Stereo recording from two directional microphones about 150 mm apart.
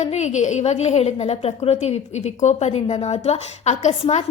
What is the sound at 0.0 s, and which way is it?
A woman's voice, 50° left (ahead or behind).